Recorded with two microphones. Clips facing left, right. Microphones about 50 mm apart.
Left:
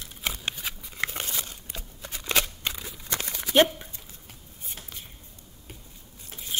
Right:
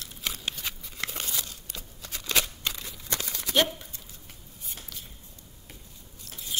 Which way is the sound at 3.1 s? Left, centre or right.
Left.